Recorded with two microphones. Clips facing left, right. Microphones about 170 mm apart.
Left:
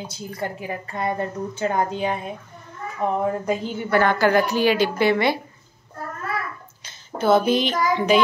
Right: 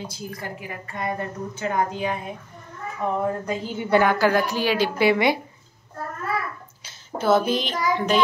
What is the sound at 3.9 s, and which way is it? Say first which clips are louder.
A woman's voice: even; 10° right (ahead or behind).